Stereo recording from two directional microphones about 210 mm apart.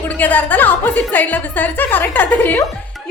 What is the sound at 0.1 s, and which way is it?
A woman's voice, 10° left (ahead or behind).